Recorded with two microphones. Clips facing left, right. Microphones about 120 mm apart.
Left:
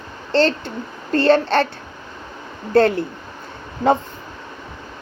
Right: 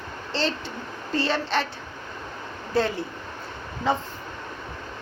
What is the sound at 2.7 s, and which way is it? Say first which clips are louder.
Speech: left 9 dB; 60° left (ahead or behind).